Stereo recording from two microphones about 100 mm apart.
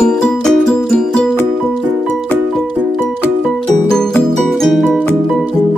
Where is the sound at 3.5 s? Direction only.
5° left (ahead or behind).